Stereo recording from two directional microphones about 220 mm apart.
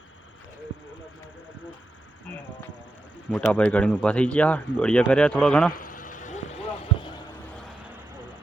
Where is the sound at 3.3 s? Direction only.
5° left (ahead or behind).